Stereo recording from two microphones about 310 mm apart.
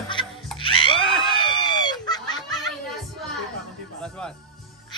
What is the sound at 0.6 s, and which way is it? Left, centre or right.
Music, centre.